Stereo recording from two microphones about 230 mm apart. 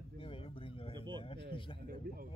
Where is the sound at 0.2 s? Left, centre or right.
Left.